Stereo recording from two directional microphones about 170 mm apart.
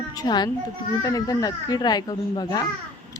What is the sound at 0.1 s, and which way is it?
A child's voice, 25° left (ahead or behind).